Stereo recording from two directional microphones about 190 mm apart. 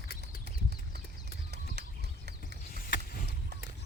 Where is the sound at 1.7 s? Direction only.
60° right (ahead or behind).